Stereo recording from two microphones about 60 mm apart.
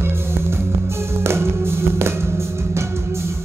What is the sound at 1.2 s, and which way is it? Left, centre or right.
Music, right.